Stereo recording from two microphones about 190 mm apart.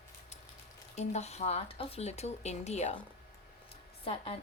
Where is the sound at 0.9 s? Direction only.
35° left (ahead or behind).